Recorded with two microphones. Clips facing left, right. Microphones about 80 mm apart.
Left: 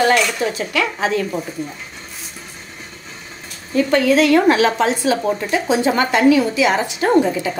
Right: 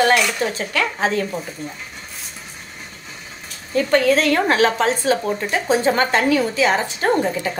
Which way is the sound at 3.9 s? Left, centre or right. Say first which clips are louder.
Left 2 dB; right.